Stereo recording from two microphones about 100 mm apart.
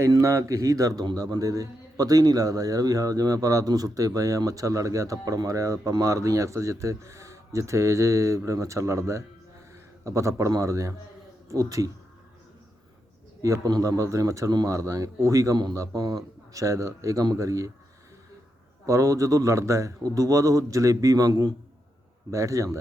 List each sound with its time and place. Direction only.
0.0 s a man's voice: 30° right (ahead or behind)
13.4 s a man's voice: 35° right (ahead or behind)
18.9 s a man's voice: 35° right (ahead or behind)